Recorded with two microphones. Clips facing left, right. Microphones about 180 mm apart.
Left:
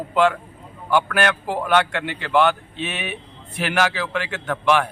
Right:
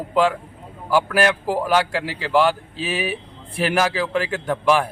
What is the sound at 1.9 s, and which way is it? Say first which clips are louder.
A man's voice: right 1 dB; 30° right (ahead or behind).